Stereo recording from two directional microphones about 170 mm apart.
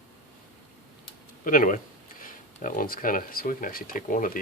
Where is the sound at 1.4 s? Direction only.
50° left (ahead or behind).